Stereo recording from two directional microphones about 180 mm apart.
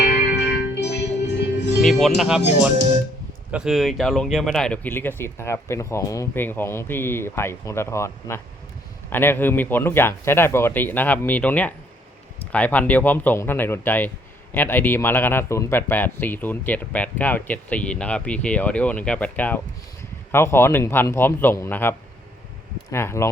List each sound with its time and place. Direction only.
0.3 s music: 70° left (ahead or behind)
1.8 s speech: centre (ahead or behind)
3.5 s speech: 5° right (ahead or behind); by 23.3 s 15° left (ahead or behind)